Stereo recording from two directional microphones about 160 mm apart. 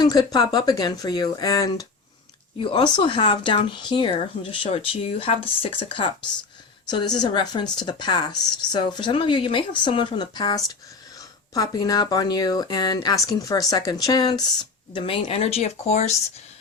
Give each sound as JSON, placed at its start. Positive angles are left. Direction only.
{"t": 0.0, "sound": "speech", "side_deg": 25}